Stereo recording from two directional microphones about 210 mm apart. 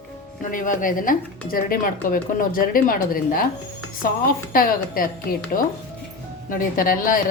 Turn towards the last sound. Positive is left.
turn(degrees=40)  # may be behind; listen again after turning